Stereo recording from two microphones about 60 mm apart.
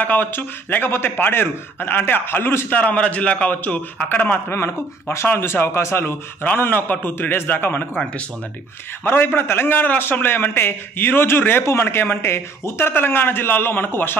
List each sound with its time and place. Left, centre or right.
0.0 s a man's voice: left
2.7 s a man's voice: left
4.5 s a man's voice: left
6.4 s a man's voice: left
9.0 s a man's voice: left